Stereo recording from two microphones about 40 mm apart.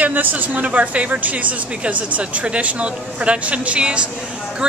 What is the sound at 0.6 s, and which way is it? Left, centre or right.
Speech, right.